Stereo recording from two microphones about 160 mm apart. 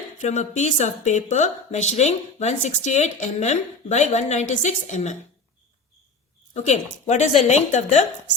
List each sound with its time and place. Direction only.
0.2 s a woman's voice: 50° left (ahead or behind)
7.1 s a woman's voice: 45° left (ahead or behind)